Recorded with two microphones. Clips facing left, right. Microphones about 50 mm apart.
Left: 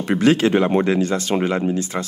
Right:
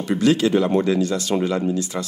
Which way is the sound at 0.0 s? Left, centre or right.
Left.